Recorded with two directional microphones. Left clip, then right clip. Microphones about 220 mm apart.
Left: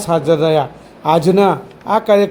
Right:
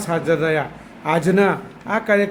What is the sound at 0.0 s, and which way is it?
A man's voice, 15° left (ahead or behind).